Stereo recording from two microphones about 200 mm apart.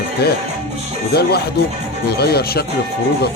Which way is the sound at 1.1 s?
50° left (ahead or behind).